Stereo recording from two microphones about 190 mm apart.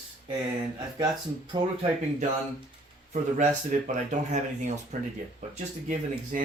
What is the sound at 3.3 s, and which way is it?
Speech, 40° right (ahead or behind).